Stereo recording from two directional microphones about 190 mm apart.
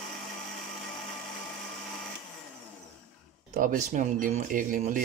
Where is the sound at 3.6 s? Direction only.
45° right (ahead or behind).